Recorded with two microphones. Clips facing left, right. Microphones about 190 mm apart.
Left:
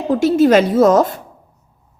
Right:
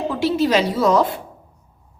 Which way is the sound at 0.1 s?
45° left (ahead or behind).